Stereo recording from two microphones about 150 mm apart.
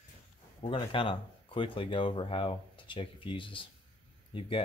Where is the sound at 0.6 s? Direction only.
40° left (ahead or behind).